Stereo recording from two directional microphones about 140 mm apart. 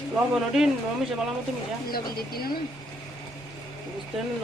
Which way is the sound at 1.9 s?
90° left.